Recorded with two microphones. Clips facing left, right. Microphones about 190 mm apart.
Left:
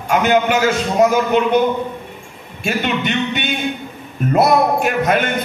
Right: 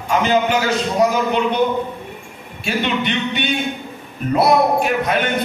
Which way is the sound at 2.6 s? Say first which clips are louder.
Left 1 dB; 45° left (ahead or behind).